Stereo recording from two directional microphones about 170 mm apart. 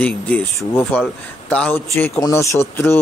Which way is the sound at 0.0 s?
10° left (ahead or behind).